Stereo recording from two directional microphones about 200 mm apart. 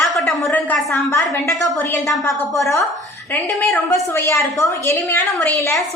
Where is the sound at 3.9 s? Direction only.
15° left (ahead or behind).